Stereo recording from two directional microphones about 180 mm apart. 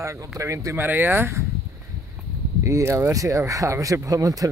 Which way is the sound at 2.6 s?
15° right (ahead or behind).